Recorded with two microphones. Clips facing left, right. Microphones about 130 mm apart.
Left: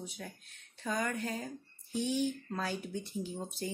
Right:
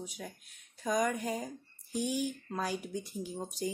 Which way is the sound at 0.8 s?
10° right (ahead or behind).